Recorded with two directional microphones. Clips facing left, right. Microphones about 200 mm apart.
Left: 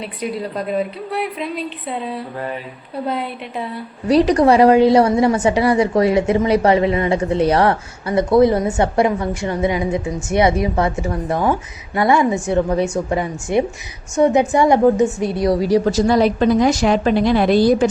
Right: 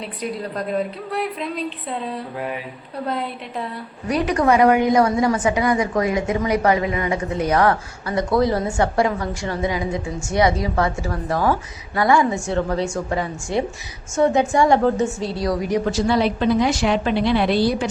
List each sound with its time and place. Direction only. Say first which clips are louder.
0.0 s a woman's voice: left 3 dB; 5° left (ahead or behind)
4.1 s a woman's voice: left 5 dB; 35° left (ahead or behind); by 15.3 s 15° left (ahead or behind)
15.4 s a woman's voice: left 6 dB; 30° left (ahead or behind); by 17.8 s 45° left (ahead or behind)